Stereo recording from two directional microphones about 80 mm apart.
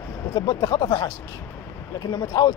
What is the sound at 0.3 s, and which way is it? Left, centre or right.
Speech, left.